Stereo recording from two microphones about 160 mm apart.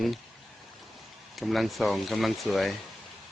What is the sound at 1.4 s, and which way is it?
Speech, centre (ahead or behind).